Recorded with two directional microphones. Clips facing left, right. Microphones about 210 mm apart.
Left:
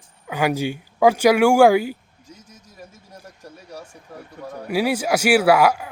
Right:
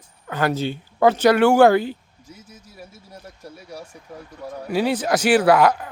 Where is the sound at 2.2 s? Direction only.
10° right (ahead or behind).